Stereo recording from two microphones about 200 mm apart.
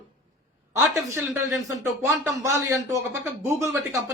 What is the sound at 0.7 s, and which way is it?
Speech, 10° right (ahead or behind).